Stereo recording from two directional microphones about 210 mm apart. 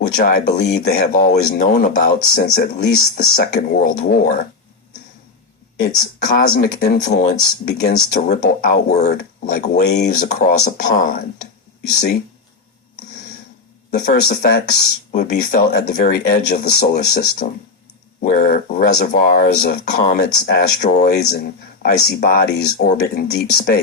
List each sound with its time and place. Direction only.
0.2 s speech: 50° left (ahead or behind)
5.8 s speech: 45° left (ahead or behind)
14.0 s speech: 45° left (ahead or behind)